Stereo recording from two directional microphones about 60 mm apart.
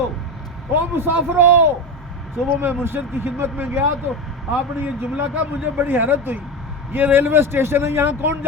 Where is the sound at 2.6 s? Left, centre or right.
Right.